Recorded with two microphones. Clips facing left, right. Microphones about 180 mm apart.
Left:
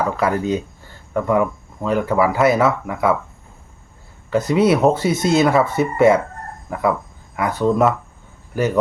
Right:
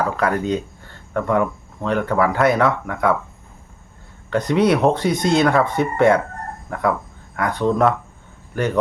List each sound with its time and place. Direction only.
0.2 s speech: 5° left (ahead or behind)
4.3 s speech: 5° left (ahead or behind)